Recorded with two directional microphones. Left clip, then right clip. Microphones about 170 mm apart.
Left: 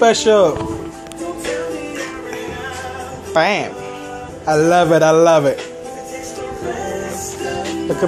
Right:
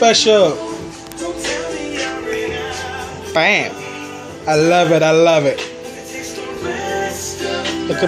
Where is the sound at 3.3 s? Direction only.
Centre (ahead or behind).